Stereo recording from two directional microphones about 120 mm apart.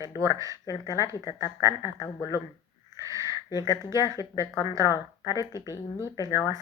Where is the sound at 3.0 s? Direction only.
30° right (ahead or behind).